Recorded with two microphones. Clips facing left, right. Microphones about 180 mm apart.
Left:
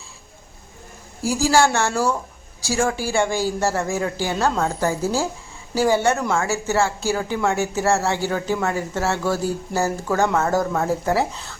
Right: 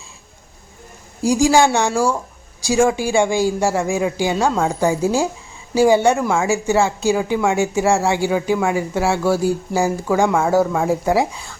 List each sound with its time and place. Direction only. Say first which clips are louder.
1.2 s speech: right 4 dB; 15° right (ahead or behind)